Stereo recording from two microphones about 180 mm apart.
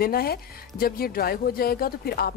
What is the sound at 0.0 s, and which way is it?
A woman's voice, 55° left (ahead or behind).